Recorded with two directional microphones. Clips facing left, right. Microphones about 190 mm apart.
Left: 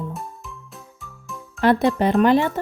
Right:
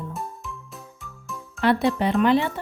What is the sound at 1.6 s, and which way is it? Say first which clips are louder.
Speech: left 3 dB; 45° left (ahead or behind).